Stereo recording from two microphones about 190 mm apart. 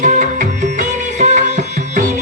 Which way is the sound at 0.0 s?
40° right (ahead or behind).